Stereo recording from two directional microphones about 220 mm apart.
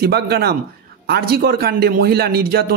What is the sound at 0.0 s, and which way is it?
A man's voice, 45° right (ahead or behind).